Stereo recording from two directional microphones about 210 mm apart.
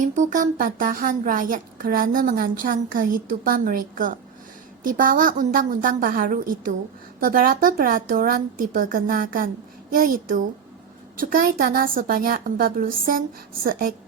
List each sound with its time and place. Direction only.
0.0 s a woman's voice: 35° right (ahead or behind)